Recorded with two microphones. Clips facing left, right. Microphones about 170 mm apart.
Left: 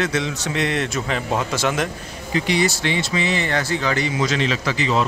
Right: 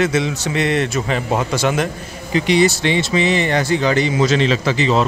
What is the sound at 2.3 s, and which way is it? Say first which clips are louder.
A man's voice: right 5 dB; 20° right (ahead or behind).